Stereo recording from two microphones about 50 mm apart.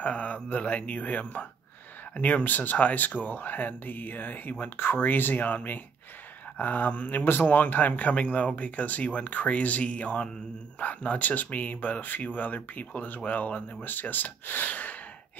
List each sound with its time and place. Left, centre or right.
0.0 s speech: left